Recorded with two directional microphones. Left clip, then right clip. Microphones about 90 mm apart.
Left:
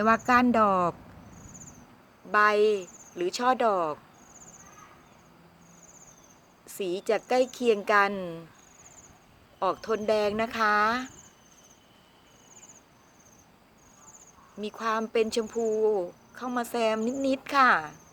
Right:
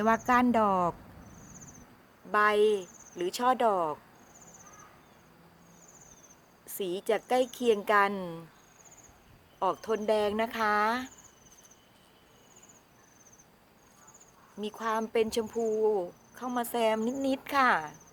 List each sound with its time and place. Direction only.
0.5 s speech: 15° left (ahead or behind)
2.3 s speech: 15° left (ahead or behind)
6.7 s speech: 10° left (ahead or behind)
8.1 s speech: centre (ahead or behind)
9.6 s speech: 10° left (ahead or behind)
14.6 s speech: 15° left (ahead or behind)
15.4 s speech: centre (ahead or behind)
15.9 s cricket: 10° left (ahead or behind)
17.0 s speech: centre (ahead or behind)
17.2 s speech: 10° left (ahead or behind)